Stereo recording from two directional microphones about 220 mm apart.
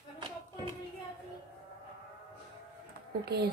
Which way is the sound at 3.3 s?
45° right (ahead or behind).